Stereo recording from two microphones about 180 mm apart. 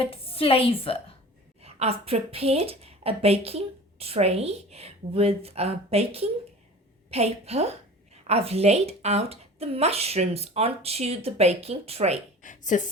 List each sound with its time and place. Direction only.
0.0 s a woman's voice: 30° left (ahead or behind)
1.6 s a woman's voice: 35° right (ahead or behind)
12.4 s a sound: 45° left (ahead or behind)